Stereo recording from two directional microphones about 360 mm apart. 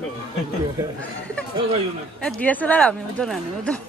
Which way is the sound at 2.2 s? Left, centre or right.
Centre.